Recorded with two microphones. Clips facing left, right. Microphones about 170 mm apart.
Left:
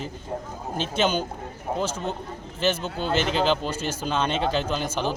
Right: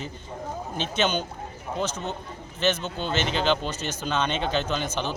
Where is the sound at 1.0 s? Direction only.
10° left (ahead or behind).